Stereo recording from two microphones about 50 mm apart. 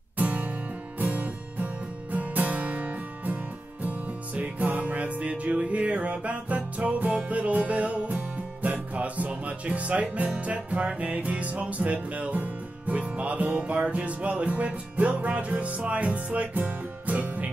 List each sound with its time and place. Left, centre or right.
0.2 s music: right
4.4 s music: right